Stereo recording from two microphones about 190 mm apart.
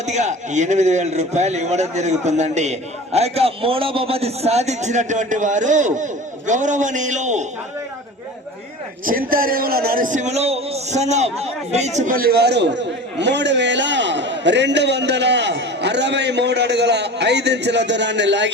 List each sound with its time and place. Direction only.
0.0 s a man's voice: 40° right (ahead or behind)
9.0 s a man's voice: 50° right (ahead or behind); by 18.5 s 65° right (ahead or behind)